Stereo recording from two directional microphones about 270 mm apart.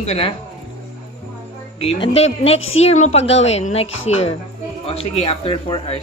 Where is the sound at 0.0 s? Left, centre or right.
Left.